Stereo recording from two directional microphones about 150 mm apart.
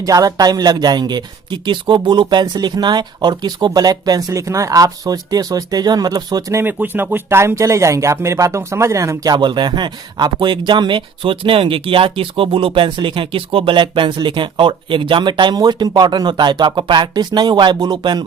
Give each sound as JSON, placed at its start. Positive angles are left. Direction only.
{"t": 0.0, "sound": "speech", "side_deg": -25}